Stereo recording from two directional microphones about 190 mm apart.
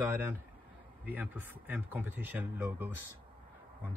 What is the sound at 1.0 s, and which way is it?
Speech, 10° right (ahead or behind).